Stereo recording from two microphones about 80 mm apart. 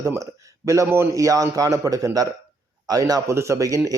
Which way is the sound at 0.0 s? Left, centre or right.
Right.